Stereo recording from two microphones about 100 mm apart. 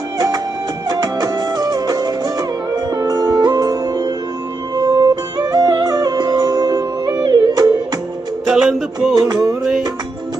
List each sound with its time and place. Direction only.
0.9 s music: 40° right (ahead or behind)
8.4 s music: 5° right (ahead or behind)
9.1 s music: 40° right (ahead or behind)